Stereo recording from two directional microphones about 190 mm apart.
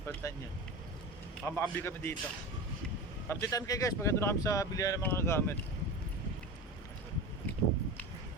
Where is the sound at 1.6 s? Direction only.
10° left (ahead or behind).